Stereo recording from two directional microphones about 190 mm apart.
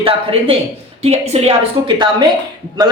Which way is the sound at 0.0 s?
30° right (ahead or behind).